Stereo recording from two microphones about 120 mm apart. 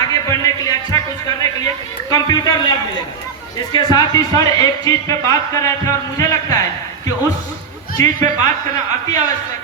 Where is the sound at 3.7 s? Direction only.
35° left (ahead or behind).